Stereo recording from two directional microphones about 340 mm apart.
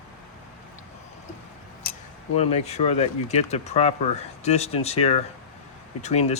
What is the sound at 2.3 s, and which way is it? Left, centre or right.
Speech, centre.